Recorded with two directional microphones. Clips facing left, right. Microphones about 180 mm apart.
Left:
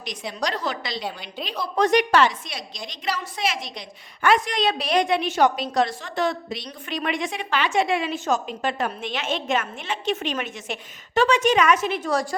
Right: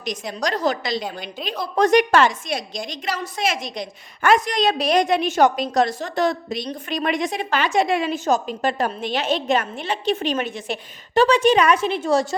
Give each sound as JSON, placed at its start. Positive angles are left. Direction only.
{"t": 0.0, "sound": "a woman's voice", "side_deg": -45}